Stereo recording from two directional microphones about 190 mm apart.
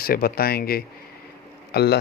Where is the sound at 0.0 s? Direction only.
50° left (ahead or behind).